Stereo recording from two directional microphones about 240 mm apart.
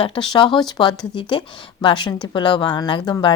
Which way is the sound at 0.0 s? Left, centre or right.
Left.